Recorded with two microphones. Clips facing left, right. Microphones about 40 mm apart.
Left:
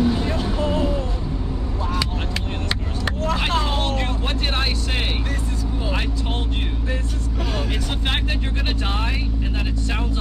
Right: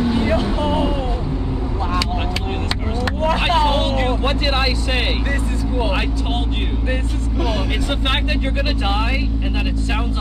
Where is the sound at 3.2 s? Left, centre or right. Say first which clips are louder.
Right 6 dB; right.